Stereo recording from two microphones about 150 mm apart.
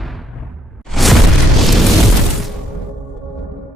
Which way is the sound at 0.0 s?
Centre (ahead or behind).